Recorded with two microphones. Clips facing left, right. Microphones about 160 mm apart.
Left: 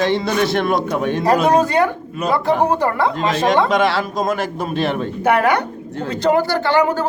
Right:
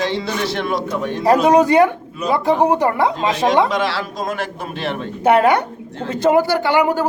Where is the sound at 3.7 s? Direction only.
55° left (ahead or behind).